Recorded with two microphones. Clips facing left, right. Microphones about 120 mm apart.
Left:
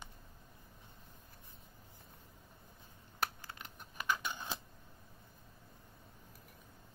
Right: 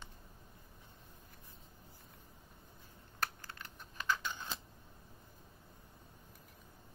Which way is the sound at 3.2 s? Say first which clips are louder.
Left 1 dB; 15° left (ahead or behind).